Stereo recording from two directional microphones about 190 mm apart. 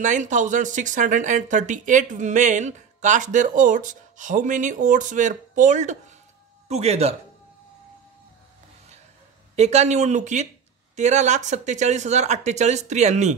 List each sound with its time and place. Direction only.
0.0 s speech: 40° right (ahead or behind)
9.6 s speech: 35° right (ahead or behind)